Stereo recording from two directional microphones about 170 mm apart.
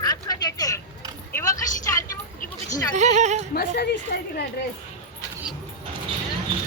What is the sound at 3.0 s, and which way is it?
Speech, 45° right (ahead or behind).